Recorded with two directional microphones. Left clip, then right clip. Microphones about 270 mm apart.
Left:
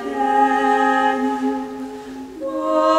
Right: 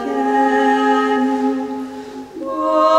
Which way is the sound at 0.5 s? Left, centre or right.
Right.